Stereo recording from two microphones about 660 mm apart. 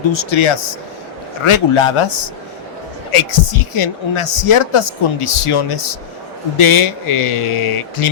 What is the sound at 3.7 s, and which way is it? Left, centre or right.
A man's voice, left.